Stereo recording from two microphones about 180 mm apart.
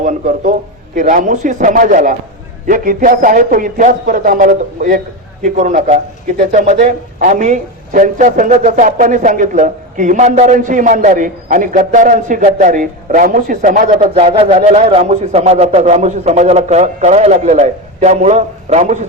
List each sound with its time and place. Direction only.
0.0 s a man's voice: 45° right (ahead or behind)
14.1 s speech: 35° right (ahead or behind)